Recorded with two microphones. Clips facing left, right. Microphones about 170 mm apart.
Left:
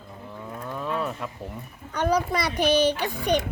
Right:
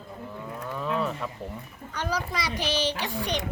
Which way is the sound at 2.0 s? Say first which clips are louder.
Left 7 dB; 55° left (ahead or behind).